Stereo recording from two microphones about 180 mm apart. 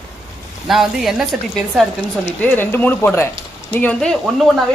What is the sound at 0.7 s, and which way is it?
Speech, centre (ahead or behind).